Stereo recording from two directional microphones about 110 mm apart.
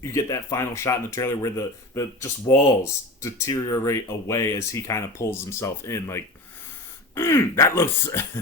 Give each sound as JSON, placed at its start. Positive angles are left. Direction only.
{"t": 0.0, "sound": "speech", "side_deg": 30}